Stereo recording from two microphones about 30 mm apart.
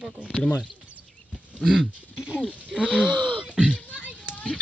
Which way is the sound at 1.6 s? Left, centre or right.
Right.